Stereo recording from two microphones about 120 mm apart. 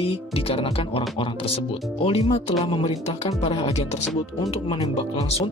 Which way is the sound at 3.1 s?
65° left (ahead or behind).